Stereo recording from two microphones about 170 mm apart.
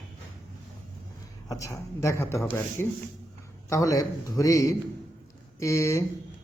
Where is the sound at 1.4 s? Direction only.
20° left (ahead or behind).